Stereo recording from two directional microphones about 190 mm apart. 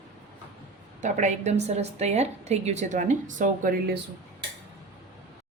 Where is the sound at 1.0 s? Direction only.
40° right (ahead or behind).